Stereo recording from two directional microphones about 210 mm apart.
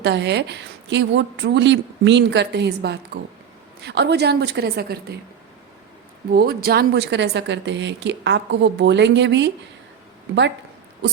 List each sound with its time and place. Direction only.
0.0 s a woman's voice: 55° right (ahead or behind)
6.3 s speech: 45° right (ahead or behind)